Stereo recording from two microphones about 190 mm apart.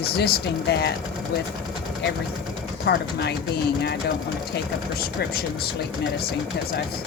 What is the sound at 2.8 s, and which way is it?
Speech, 60° left (ahead or behind).